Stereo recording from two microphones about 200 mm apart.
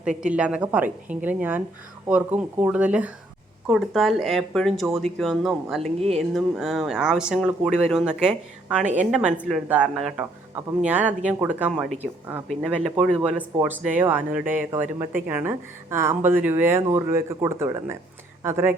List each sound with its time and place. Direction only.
0.2 s speech: 5° right (ahead or behind)
8.8 s a woman's voice: 40° right (ahead or behind)
9.1 s speech: 5° right (ahead or behind)